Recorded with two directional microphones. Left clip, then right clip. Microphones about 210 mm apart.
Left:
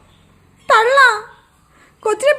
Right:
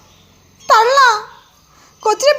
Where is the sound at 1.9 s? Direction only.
20° left (ahead or behind).